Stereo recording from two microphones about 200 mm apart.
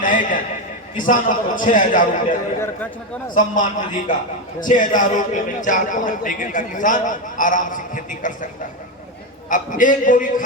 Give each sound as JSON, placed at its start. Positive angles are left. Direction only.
{"t": 0.0, "sound": "a man's voice", "side_deg": 40}
{"t": 3.3, "sound": "a man's voice", "side_deg": 40}
{"t": 9.5, "sound": "a man's voice", "side_deg": 40}